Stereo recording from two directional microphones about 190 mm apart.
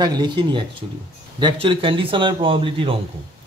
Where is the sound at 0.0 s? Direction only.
25° right (ahead or behind).